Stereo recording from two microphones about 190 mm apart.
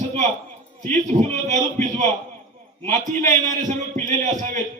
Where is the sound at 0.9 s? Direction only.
40° right (ahead or behind).